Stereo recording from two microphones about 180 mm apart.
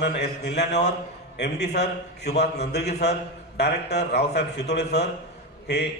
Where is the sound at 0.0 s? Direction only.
70° left (ahead or behind).